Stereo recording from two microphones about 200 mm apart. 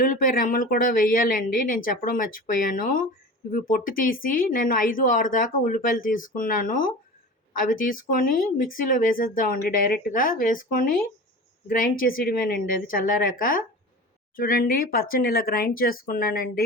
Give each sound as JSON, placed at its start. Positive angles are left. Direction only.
{"t": 0.0, "sound": "speech", "side_deg": 45}